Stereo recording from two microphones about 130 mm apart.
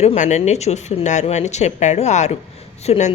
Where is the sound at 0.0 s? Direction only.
60° left (ahead or behind).